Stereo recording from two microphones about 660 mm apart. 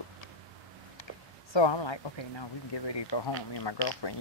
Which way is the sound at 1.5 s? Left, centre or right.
Left.